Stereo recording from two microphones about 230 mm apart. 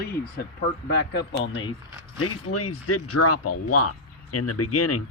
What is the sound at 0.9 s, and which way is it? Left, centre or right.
Speech, left.